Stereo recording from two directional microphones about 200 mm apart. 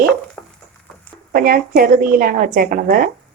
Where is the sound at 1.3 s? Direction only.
45° right (ahead or behind).